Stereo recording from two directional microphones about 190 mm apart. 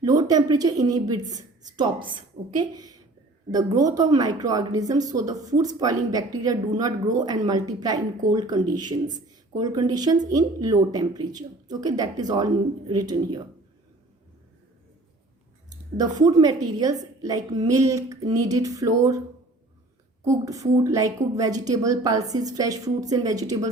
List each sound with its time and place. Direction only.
0.0 s a woman's voice: 20° right (ahead or behind)
16.2 s a woman's voice: 20° right (ahead or behind)
20.2 s a woman's voice: 15° right (ahead or behind)